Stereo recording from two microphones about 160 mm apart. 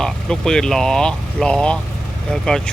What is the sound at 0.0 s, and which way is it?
Speech, 5° left (ahead or behind).